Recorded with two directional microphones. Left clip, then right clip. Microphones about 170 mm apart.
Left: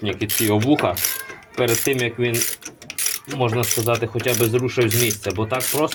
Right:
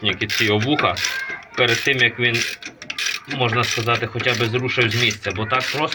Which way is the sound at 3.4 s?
50° left (ahead or behind).